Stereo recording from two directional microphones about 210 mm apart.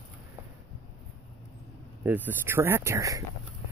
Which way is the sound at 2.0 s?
10° right (ahead or behind).